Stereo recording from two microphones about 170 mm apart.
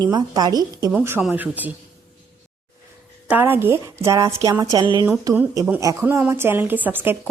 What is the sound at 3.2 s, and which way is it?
A woman's voice, 10° right (ahead or behind).